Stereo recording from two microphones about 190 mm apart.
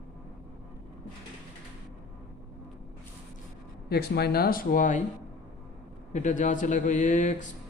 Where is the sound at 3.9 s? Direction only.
55° left (ahead or behind).